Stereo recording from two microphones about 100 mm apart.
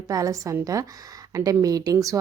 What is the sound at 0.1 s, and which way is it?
A woman's voice, 35° right (ahead or behind).